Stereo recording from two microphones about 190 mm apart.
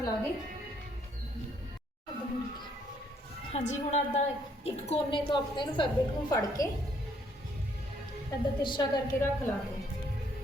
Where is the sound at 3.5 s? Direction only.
35° left (ahead or behind).